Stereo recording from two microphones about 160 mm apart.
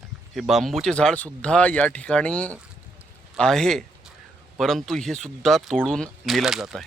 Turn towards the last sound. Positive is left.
turn(degrees=0)  # may be behind; listen again after turning